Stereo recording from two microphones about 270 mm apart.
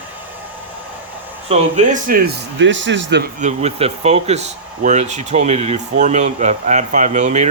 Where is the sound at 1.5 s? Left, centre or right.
Right.